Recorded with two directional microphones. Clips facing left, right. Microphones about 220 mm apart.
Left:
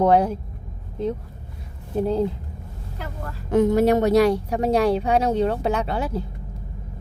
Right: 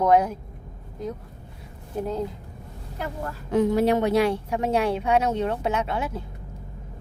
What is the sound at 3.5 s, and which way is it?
Speech, 45° left (ahead or behind).